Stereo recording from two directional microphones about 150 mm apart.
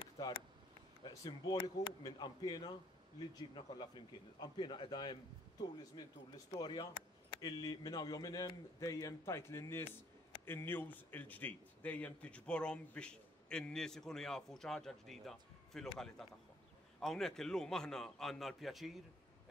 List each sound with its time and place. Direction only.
1.0 s a man's voice: 25° left (ahead or behind); by 18.9 s centre (ahead or behind)